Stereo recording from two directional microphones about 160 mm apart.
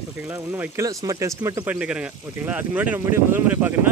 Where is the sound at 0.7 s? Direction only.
20° right (ahead or behind).